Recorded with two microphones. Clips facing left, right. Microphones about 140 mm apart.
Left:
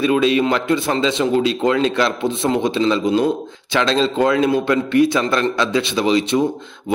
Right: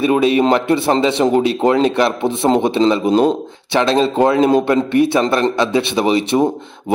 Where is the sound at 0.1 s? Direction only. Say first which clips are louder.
Right 5 dB; 35° right (ahead or behind).